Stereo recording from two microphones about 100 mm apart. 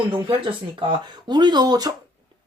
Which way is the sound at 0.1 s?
60° right (ahead or behind).